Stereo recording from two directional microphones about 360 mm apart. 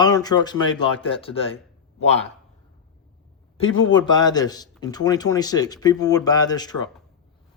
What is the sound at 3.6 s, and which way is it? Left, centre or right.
Speech, left.